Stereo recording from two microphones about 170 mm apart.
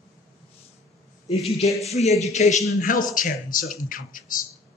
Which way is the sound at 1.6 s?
40° left (ahead or behind).